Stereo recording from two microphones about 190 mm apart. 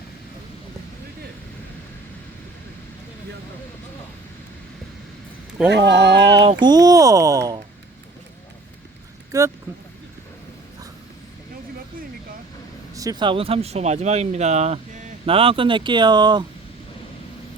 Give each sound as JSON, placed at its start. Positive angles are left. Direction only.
{"t": 5.6, "sound": "speech", "side_deg": -65}
{"t": 6.4, "sound": "speech", "side_deg": -25}
{"t": 9.3, "sound": "speech", "side_deg": -15}
{"t": 12.9, "sound": "speech", "side_deg": -20}